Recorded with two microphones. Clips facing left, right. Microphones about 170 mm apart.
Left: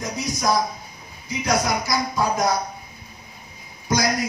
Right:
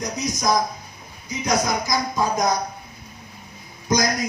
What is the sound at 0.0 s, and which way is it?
Speech, 20° right (ahead or behind).